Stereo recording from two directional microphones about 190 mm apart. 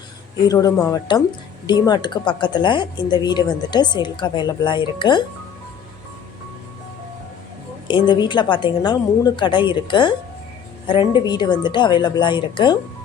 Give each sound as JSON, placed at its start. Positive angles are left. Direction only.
{"t": 0.4, "sound": "speech", "side_deg": 20}
{"t": 7.9, "sound": "speech", "side_deg": 25}